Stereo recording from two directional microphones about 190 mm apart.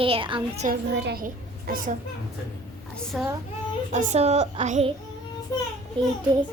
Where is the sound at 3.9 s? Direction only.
40° right (ahead or behind).